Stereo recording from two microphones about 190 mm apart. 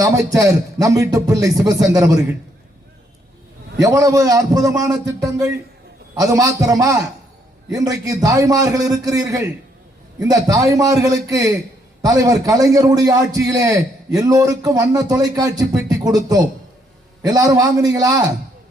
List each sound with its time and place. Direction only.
0.0 s speech: 15° right (ahead or behind)
3.8 s a man's voice: 20° right (ahead or behind)